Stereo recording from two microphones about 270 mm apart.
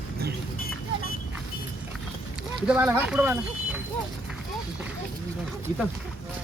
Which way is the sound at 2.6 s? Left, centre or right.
Centre.